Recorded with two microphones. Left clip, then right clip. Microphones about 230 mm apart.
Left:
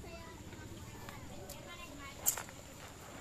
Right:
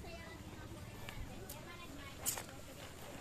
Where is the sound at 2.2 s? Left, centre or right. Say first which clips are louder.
Left 4 dB; centre.